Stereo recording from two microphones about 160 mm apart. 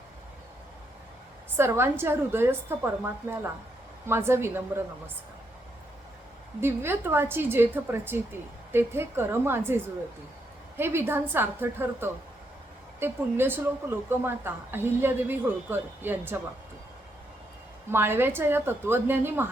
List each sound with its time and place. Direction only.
1.5 s a woman's voice: 15° right (ahead or behind)
6.6 s a woman's voice: 15° right (ahead or behind)
17.9 s a woman's voice: 15° right (ahead or behind)